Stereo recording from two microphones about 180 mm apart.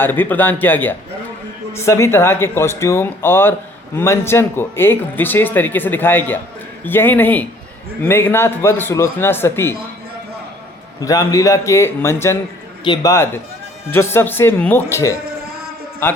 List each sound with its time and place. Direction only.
0.0 s speech: 10° left (ahead or behind)
11.0 s a man's voice: 20° left (ahead or behind)